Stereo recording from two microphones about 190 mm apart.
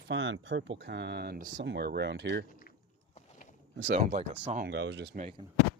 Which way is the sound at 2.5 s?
45° left (ahead or behind).